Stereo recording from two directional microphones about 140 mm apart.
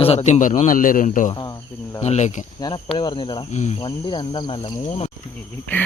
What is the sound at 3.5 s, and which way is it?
Speech, 55° left (ahead or behind).